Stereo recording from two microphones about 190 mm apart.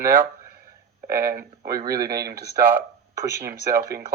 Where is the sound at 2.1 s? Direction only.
55° right (ahead or behind).